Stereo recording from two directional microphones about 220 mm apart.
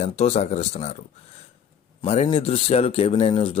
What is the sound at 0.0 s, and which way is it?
Speech, 30° left (ahead or behind).